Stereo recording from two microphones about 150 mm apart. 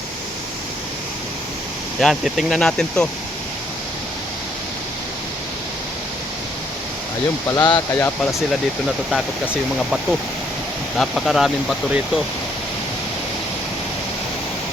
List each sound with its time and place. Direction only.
2.0 s speech: centre (ahead or behind)
7.5 s speech: 25° left (ahead or behind)
9.0 s speech: 5° right (ahead or behind)